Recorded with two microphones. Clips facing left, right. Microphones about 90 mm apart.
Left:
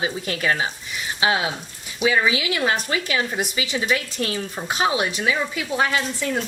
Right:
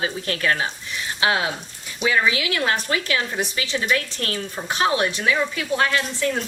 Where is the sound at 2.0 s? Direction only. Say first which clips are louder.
Left 1 dB; 15° left (ahead or behind).